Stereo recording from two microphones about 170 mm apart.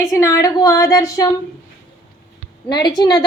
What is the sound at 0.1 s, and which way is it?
A woman's voice, 20° left (ahead or behind).